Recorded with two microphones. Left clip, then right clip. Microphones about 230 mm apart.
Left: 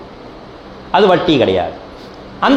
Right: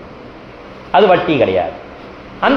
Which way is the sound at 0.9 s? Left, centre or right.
Left.